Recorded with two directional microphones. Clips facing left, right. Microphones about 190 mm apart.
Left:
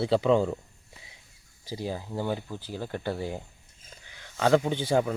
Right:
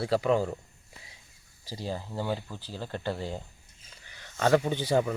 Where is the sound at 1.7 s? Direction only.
15° left (ahead or behind).